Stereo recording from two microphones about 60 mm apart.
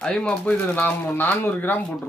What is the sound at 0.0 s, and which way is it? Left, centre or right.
Speech, centre.